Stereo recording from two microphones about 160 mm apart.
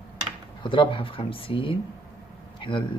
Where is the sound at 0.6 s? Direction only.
30° left (ahead or behind).